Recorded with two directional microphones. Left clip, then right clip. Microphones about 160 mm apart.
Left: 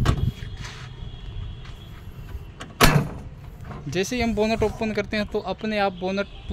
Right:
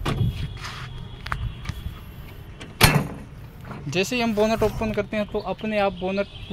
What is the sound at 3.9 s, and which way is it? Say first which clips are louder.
Speech: right 1 dB; 20° left (ahead or behind).